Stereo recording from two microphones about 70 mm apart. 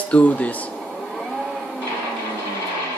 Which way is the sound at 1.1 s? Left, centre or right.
Centre.